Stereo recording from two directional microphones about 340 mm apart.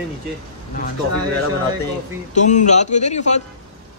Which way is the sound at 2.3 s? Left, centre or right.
Left.